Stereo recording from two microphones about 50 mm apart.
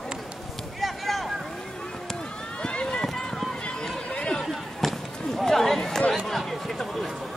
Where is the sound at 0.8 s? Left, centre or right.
Centre.